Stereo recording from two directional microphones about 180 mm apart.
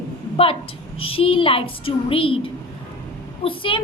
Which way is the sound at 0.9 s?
30° left (ahead or behind).